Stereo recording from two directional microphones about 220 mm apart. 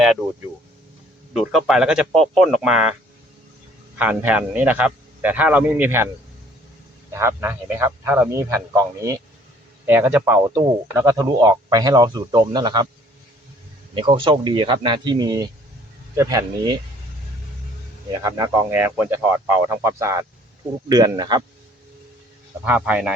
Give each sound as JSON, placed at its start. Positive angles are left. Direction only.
{"t": 1.3, "sound": "a man's voice", "side_deg": 0}
{"t": 3.9, "sound": "a man's voice", "side_deg": -5}
{"t": 7.1, "sound": "a man's voice", "side_deg": -10}
{"t": 13.9, "sound": "a man's voice", "side_deg": -20}
{"t": 18.2, "sound": "a man's voice", "side_deg": -15}
{"t": 22.6, "sound": "a man's voice", "side_deg": -5}